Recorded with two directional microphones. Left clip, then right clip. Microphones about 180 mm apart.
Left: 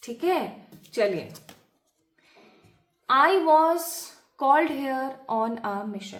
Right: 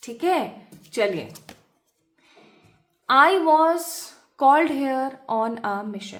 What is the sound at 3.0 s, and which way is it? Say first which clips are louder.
A woman's voice: right 3 dB; 40° right (ahead or behind).